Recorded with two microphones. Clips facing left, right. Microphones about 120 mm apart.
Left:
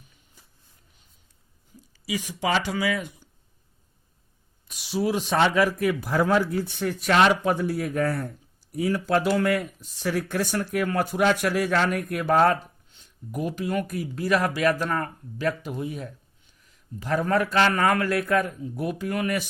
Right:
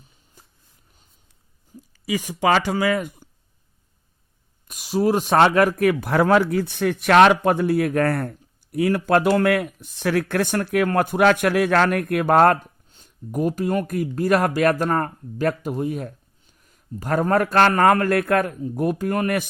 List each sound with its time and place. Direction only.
2.0 s speech: 50° right (ahead or behind)
4.7 s speech: 45° right (ahead or behind)